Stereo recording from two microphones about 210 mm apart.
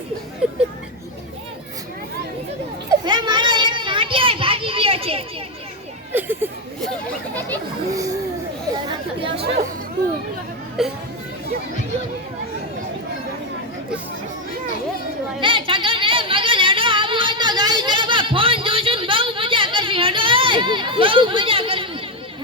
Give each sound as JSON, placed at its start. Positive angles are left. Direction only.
{"t": 0.4, "sound": "speech", "side_deg": -5}
{"t": 3.0, "sound": "children playing", "side_deg": -20}
{"t": 6.1, "sound": "speech", "side_deg": -10}
{"t": 9.2, "sound": "speech", "side_deg": -25}
{"t": 10.8, "sound": "speech", "side_deg": 0}
{"t": 15.4, "sound": "a sound", "side_deg": -25}